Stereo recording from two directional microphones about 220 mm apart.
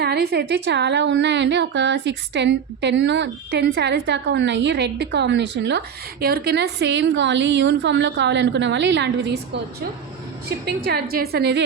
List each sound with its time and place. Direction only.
0.0 s a woman's voice: 45° right (ahead or behind)
10.8 s a woman's voice: 45° right (ahead or behind)